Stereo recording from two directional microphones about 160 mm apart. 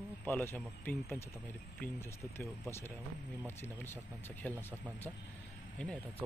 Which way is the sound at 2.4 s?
15° left (ahead or behind).